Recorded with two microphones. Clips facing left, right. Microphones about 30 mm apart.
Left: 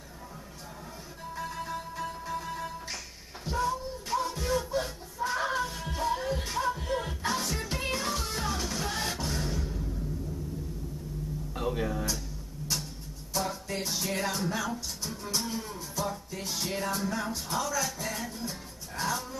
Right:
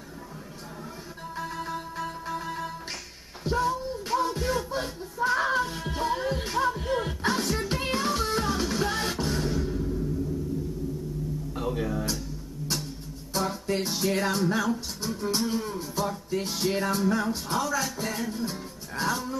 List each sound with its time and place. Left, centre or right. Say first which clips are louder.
1.7 s music: right 2 dB; centre
11.5 s music: right 1 dB; centre
13.4 s music: right 5 dB; centre